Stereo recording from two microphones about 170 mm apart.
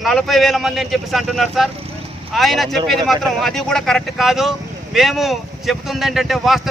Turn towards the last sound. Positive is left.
turn(degrees=0)  # may be behind; listen again after turning